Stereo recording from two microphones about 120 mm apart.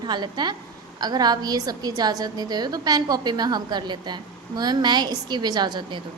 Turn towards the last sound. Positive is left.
turn(degrees=-35)  # may be behind; listen again after turning